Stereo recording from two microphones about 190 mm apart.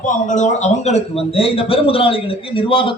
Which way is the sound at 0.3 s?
40° left (ahead or behind).